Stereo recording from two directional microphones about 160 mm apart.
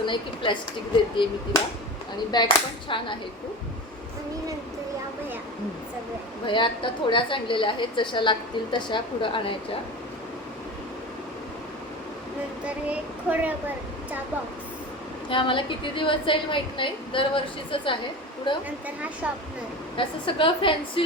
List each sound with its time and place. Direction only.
0.0 s a woman's voice: 30° left (ahead or behind)
2.3 s a woman's voice: 25° left (ahead or behind)
6.4 s a woman's voice: 30° left (ahead or behind)
12.6 s speech: 10° right (ahead or behind)
15.3 s a woman's voice: 30° left (ahead or behind)
20.0 s a woman's voice: 30° left (ahead or behind)